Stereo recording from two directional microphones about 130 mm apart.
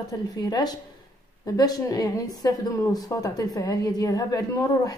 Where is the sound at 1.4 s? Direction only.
30° left (ahead or behind).